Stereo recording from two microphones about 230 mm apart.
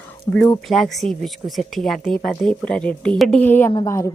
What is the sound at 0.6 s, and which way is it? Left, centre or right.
Speech, centre.